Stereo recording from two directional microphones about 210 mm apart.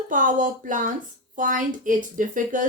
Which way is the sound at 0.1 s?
40° right (ahead or behind).